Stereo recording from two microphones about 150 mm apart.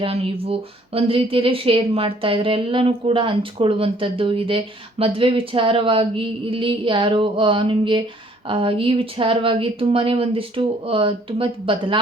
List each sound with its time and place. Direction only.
0.0 s speech: 40° right (ahead or behind)